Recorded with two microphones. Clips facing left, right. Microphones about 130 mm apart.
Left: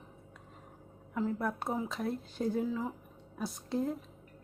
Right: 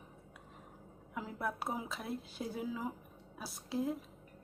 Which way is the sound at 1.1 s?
5° right (ahead or behind).